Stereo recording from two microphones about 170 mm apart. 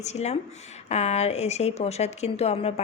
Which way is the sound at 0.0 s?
40° left (ahead or behind).